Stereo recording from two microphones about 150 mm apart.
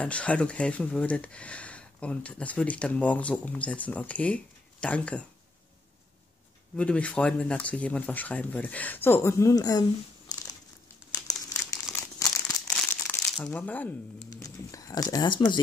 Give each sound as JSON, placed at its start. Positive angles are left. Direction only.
{"t": 0.0, "sound": "speech", "side_deg": 10}
{"t": 6.8, "sound": "speech", "side_deg": 10}
{"t": 11.1, "sound": "crumpling", "side_deg": 20}
{"t": 12.7, "sound": "crumpling", "side_deg": 10}
{"t": 14.3, "sound": "speech", "side_deg": 25}